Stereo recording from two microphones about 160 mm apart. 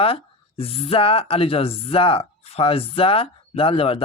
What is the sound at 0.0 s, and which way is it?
Speech, 35° left (ahead or behind).